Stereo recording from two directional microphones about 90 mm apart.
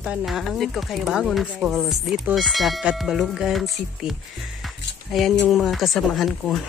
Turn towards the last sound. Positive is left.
turn(degrees=0)  # may be behind; listen again after turning